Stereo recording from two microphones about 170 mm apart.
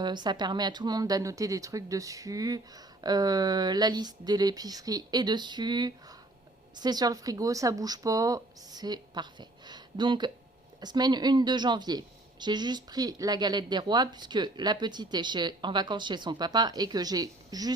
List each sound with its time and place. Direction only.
0.0 s speech: 25° right (ahead or behind)